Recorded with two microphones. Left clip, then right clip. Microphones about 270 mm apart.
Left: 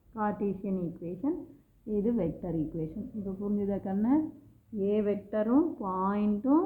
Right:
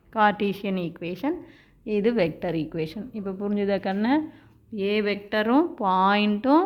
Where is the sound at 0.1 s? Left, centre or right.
Right.